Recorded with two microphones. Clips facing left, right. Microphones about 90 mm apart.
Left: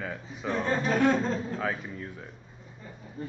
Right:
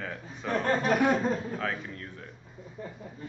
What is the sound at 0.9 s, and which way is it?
Chuckle, 10° right (ahead or behind).